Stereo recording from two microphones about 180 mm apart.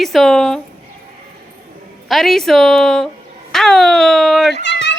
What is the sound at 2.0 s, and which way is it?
Speech, centre (ahead or behind).